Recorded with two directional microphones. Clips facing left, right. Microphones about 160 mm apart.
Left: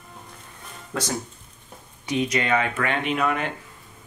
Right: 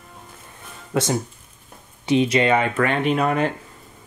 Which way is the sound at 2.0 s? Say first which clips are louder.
Right 6 dB; 30° right (ahead or behind).